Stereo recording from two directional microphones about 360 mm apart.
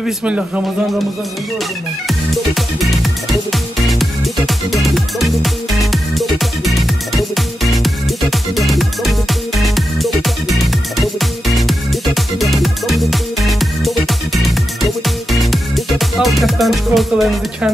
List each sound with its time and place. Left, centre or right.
0.0 s a man's voice: centre
2.0 s music: centre